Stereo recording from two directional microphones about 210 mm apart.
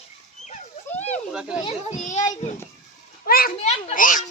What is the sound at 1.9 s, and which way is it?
A child's voice, 35° left (ahead or behind).